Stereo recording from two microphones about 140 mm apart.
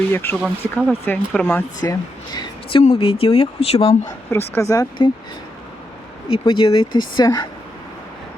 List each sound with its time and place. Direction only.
0.1 s speech: 15° left (ahead or behind)
0.4 s speech: 5° right (ahead or behind)
1.0 s speech: 10° left (ahead or behind)
1.8 s speech: 30° left (ahead or behind)
2.8 s speech: 45° left (ahead or behind)
4.3 s speech: 15° left (ahead or behind)
6.2 s speech: 40° left (ahead or behind)